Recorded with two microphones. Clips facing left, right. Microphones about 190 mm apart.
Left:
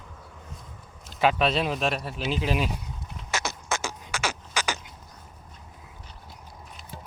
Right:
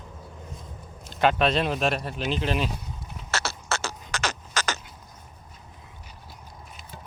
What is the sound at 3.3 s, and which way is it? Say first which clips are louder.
Beatboxing: even; 15° left (ahead or behind).